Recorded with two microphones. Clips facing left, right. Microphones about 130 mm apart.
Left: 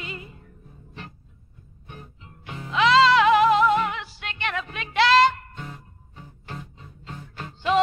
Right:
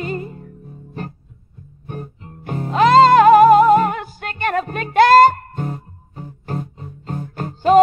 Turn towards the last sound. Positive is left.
turn(degrees=-45)  # may be behind; listen again after turning